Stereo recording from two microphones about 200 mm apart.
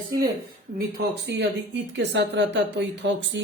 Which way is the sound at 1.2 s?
60° right (ahead or behind).